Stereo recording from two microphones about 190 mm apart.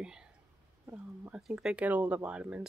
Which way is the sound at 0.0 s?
5° right (ahead or behind).